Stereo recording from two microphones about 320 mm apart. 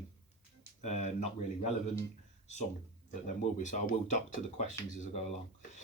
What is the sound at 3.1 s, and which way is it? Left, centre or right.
Speech, left.